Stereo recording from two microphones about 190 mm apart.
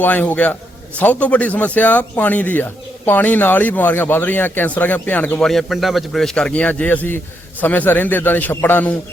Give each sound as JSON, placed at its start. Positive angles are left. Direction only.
{"t": 0.0, "sound": "a man's voice", "side_deg": 10}